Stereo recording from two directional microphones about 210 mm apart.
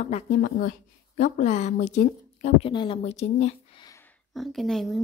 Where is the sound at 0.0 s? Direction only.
35° left (ahead or behind).